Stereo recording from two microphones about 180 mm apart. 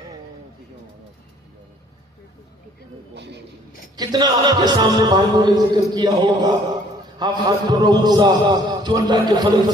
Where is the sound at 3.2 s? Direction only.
70° right (ahead or behind).